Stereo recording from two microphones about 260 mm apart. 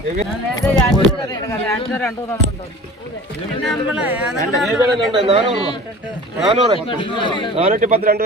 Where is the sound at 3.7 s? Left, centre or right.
Centre.